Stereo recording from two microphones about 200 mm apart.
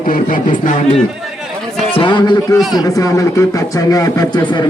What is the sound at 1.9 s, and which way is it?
Speech, 25° left (ahead or behind).